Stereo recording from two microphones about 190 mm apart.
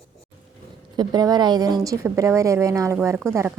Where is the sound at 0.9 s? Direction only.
20° right (ahead or behind).